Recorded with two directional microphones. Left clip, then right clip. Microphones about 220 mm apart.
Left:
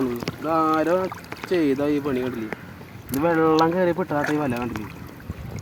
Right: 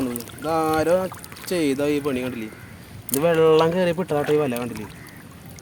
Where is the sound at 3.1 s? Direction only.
40° right (ahead or behind).